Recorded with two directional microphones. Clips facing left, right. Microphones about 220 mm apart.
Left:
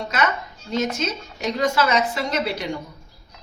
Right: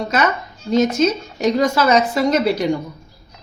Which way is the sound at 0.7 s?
40° right (ahead or behind).